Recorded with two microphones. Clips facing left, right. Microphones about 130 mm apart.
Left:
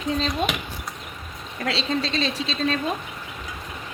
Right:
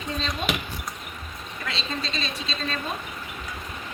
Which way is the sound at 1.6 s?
85° left.